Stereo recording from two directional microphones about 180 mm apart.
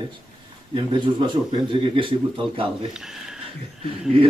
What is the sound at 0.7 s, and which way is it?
Speech, 25° right (ahead or behind).